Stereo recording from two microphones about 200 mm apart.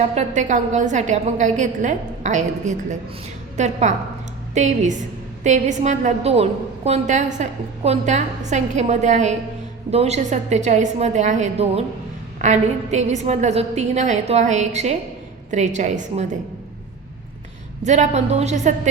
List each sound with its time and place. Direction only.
0.1 s a woman's voice: 35° right (ahead or behind)
17.8 s a woman's voice: 35° right (ahead or behind)